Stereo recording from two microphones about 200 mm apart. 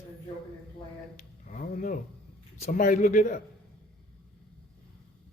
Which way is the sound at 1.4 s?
45° left (ahead or behind).